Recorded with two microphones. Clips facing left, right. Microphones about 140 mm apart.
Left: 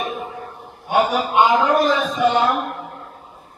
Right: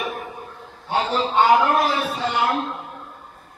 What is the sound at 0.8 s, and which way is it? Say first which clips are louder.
A man's voice: left 4 dB; 10° left (ahead or behind).